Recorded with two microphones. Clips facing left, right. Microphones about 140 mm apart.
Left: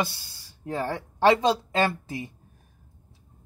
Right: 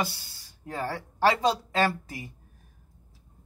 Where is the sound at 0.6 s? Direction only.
25° left (ahead or behind).